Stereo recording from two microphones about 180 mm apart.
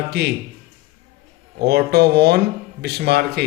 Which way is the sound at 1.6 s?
65° right (ahead or behind).